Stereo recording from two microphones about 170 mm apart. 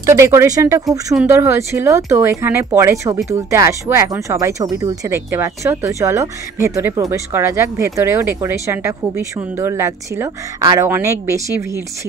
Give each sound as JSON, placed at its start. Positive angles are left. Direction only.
{"t": 0.0, "sound": "speech", "side_deg": -15}